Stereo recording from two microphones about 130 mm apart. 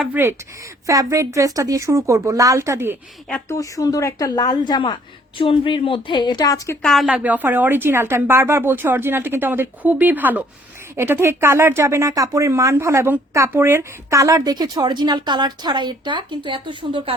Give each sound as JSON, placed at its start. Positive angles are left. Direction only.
{"t": 0.0, "sound": "speech", "side_deg": -15}
{"t": 3.5, "sound": "a woman's voice", "side_deg": 25}
{"t": 6.8, "sound": "speech", "side_deg": 0}
{"t": 7.1, "sound": "speech", "side_deg": -10}